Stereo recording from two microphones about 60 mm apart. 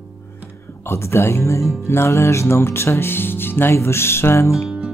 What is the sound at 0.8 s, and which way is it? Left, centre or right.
Music, left.